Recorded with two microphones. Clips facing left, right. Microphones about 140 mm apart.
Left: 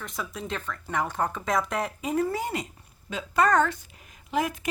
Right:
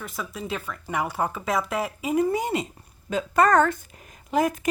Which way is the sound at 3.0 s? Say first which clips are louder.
Right 3 dB; 45° right (ahead or behind).